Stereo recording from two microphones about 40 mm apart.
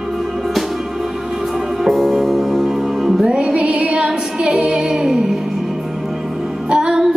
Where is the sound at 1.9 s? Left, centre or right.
Centre.